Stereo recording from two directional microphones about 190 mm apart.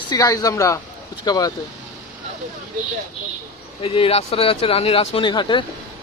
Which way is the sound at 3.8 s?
30° left (ahead or behind).